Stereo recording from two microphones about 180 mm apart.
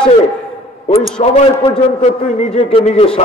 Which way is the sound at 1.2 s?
35° left (ahead or behind).